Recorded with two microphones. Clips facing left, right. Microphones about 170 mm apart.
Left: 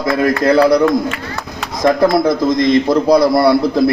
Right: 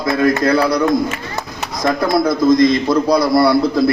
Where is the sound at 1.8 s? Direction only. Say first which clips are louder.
Left 4 dB; 25° left (ahead or behind).